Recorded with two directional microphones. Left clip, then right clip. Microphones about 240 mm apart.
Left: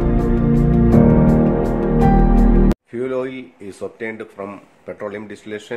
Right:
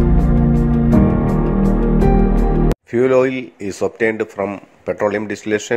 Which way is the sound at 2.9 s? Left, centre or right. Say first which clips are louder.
Right 9 dB; right.